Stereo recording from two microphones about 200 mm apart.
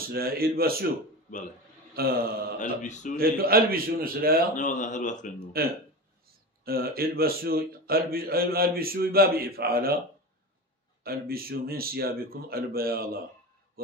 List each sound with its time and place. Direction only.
0.1 s a man's voice: 50° right (ahead or behind)
2.0 s a man's voice: 50° right (ahead or behind)
2.6 s a man's voice: 40° left (ahead or behind)
3.2 s a man's voice: 50° right (ahead or behind)
4.6 s a man's voice: 40° left (ahead or behind)
6.6 s a man's voice: 50° right (ahead or behind)
11.1 s a man's voice: 50° right (ahead or behind)